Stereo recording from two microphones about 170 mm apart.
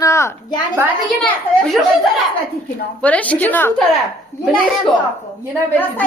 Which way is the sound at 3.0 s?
10° left (ahead or behind).